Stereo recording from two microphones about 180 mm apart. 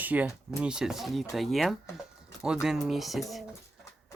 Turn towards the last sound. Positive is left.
turn(degrees=0)  # may be behind; listen again after turning